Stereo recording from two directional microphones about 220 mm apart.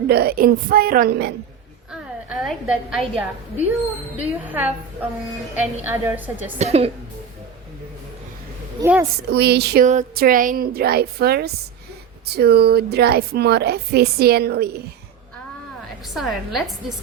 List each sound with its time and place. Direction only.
0.1 s a woman's voice: 45° right (ahead or behind)
2.4 s a woman's voice: centre (ahead or behind)
5.8 s a woman's voice: 10° right (ahead or behind)
6.6 s a woman's voice: 30° right (ahead or behind)
8.8 s a woman's voice: 10° right (ahead or behind)
9.3 s a woman's voice: 50° right (ahead or behind)
9.8 s a woman's voice: 35° right (ahead or behind)
16.1 s a woman's voice: centre (ahead or behind)